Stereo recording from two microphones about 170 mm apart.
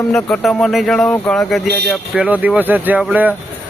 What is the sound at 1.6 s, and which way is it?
Speech, 75° right (ahead or behind).